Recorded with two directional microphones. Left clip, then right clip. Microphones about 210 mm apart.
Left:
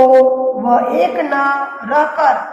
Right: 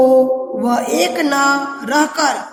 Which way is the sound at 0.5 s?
35° right (ahead or behind).